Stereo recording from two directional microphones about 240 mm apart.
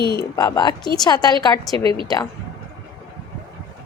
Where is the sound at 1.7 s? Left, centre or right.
Right.